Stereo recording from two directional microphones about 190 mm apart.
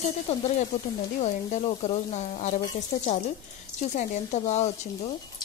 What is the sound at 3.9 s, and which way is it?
Speech, 40° left (ahead or behind).